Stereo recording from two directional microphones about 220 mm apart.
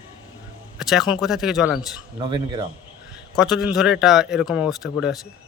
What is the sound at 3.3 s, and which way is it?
A man's voice, centre (ahead or behind).